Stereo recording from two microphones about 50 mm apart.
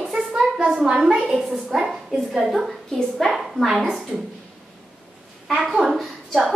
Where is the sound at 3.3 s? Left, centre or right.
Centre.